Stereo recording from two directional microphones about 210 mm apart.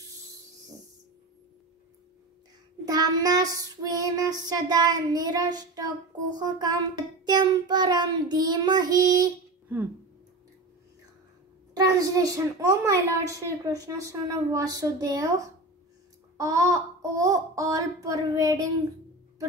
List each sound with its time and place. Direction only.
2.8 s a child's voice: 15° right (ahead or behind)
6.3 s child singing: 20° right (ahead or behind)
11.7 s a child's voice: 15° right (ahead or behind)